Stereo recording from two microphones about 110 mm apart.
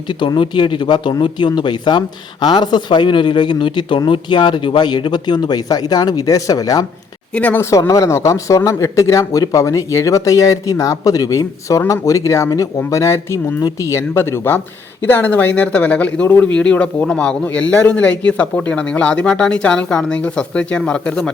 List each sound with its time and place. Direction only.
0.1 s speech: 45° left (ahead or behind)
7.3 s speech: 15° left (ahead or behind)
7.6 s speech: 30° left (ahead or behind); by 21.2 s 10° left (ahead or behind)